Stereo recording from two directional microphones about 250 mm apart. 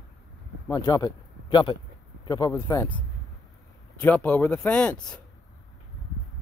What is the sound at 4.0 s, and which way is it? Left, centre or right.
Speech, centre.